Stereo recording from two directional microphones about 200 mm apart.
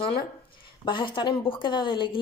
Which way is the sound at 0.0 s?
25° left (ahead or behind).